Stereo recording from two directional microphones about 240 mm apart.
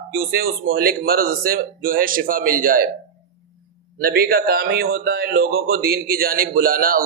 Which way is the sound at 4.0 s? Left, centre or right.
Right.